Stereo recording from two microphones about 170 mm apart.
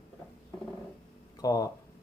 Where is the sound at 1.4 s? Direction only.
20° left (ahead or behind).